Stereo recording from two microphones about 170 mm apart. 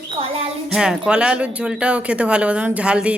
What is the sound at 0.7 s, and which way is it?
Speech, 5° right (ahead or behind).